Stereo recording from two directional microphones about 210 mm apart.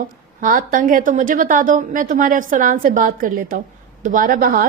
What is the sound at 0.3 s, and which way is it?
A woman's voice, 40° right (ahead or behind).